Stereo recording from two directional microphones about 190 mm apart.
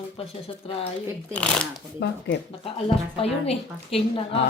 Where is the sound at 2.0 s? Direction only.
65° left (ahead or behind).